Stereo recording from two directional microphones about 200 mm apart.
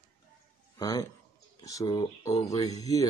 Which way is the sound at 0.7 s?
20° left (ahead or behind).